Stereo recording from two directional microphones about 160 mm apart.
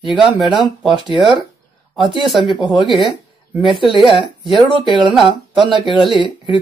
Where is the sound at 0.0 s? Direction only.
Centre (ahead or behind).